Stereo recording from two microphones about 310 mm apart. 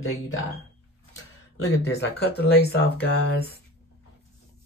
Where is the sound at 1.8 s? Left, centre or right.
Left.